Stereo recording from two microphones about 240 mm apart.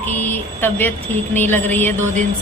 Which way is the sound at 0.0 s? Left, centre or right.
Centre.